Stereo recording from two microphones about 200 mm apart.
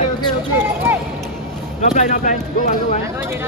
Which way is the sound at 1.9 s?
40° left (ahead or behind).